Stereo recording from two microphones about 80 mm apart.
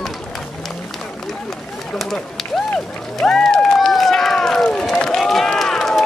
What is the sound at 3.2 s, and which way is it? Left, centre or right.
Run, centre.